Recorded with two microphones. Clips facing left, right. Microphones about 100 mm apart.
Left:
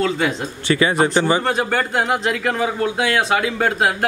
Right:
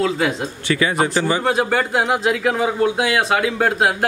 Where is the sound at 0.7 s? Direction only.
30° left (ahead or behind).